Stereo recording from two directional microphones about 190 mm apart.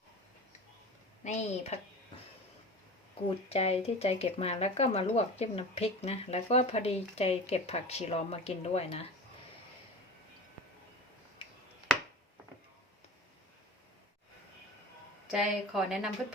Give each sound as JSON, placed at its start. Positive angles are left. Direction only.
{"t": 1.2, "sound": "speech", "side_deg": 40}
{"t": 3.2, "sound": "speech", "side_deg": 30}
{"t": 15.3, "sound": "a woman's voice", "side_deg": 0}